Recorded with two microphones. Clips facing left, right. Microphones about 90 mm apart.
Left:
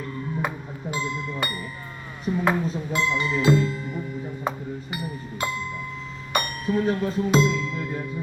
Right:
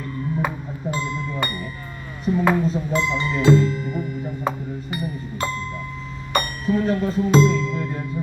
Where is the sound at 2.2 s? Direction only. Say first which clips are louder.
Right 4 dB; centre (ahead or behind).